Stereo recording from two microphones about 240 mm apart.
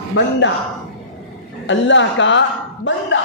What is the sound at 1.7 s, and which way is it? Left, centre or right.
A man's voice, left.